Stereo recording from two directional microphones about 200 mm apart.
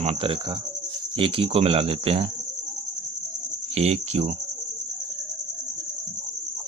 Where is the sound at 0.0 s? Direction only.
30° right (ahead or behind).